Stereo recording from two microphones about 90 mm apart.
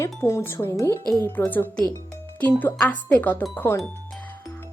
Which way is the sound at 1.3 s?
20° left (ahead or behind).